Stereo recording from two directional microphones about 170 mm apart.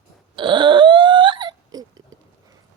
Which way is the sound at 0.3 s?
30° right (ahead or behind).